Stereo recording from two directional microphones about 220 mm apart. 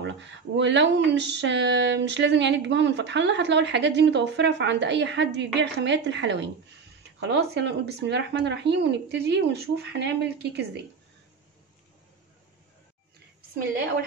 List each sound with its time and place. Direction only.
0.6 s speech: 55° right (ahead or behind)